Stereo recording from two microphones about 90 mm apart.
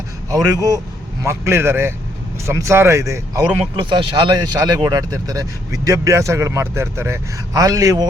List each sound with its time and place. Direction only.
0.3 s speech: 40° right (ahead or behind)
1.2 s a man's voice: 30° right (ahead or behind)
3.8 s speech: 60° right (ahead or behind); by 7.2 s 30° right (ahead or behind)
7.5 s speech: 40° right (ahead or behind)